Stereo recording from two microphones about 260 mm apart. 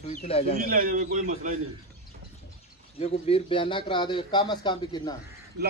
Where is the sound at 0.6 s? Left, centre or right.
Right.